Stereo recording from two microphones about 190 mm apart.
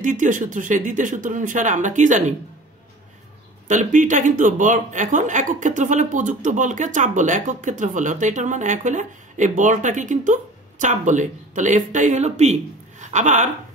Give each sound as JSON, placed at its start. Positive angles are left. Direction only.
{"t": 0.0, "sound": "speech", "side_deg": -45}
{"t": 3.6, "sound": "speech", "side_deg": -40}